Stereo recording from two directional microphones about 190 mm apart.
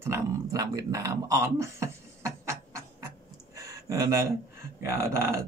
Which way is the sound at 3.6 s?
15° right (ahead or behind).